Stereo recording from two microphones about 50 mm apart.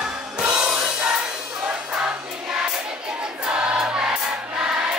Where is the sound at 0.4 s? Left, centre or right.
Right.